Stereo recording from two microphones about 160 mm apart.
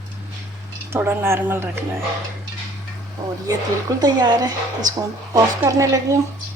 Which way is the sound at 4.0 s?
25° right (ahead or behind).